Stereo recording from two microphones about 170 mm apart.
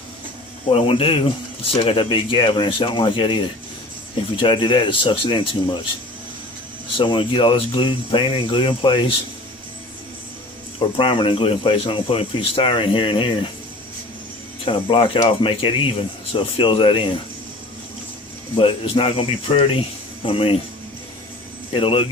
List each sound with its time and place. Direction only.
0.7 s speech: 35° left (ahead or behind)
6.9 s speech: 30° left (ahead or behind)
10.9 s speech: 30° left (ahead or behind)
14.6 s speech: 30° left (ahead or behind)
18.5 s speech: 30° left (ahead or behind)
21.7 s speech: 30° left (ahead or behind)